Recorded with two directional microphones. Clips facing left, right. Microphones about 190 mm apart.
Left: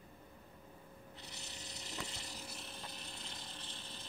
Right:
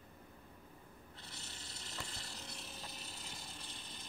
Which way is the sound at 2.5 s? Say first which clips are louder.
Left 1 dB; centre (ahead or behind).